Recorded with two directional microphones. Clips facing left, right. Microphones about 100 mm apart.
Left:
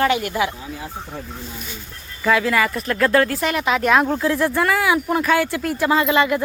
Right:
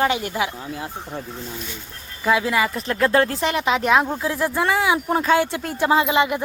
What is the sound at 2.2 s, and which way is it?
Speech, 20° right (ahead or behind).